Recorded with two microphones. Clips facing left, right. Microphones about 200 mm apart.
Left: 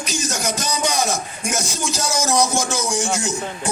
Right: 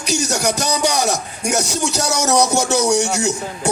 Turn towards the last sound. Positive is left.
turn(degrees=-70)  # may be behind; listen again after turning